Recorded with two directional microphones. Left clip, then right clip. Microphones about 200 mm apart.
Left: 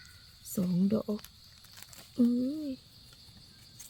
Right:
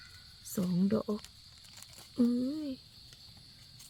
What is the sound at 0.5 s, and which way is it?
Speech, 20° left (ahead or behind).